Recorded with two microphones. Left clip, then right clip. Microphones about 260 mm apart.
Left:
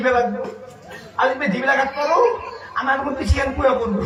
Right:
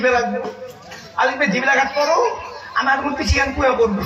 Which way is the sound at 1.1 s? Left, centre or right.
Right.